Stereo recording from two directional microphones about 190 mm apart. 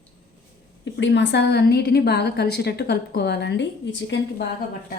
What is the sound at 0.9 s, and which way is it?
A woman's voice, 75° left (ahead or behind).